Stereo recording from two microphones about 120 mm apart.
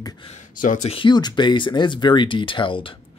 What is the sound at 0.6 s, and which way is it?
Speech, 90° left.